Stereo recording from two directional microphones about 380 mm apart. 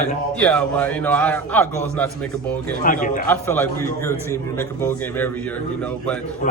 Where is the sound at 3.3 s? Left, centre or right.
Centre.